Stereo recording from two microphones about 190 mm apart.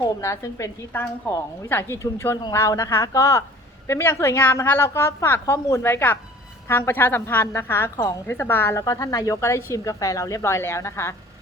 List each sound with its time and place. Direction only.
0.0 s a woman's voice: 15° left (ahead or behind)